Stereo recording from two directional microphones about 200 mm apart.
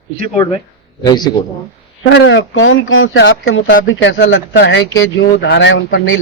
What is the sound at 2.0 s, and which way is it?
Speech, 65° left (ahead or behind).